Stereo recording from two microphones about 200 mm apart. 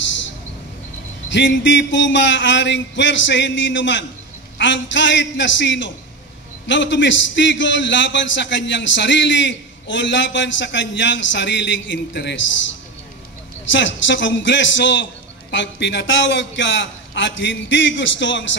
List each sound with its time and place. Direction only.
1.3 s a man's voice: 65° left (ahead or behind)
13.7 s a man's voice: 65° left (ahead or behind)